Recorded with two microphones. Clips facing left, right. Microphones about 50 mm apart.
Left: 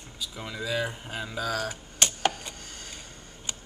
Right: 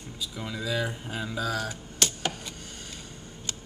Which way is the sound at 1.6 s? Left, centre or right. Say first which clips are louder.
Left 1 dB; left.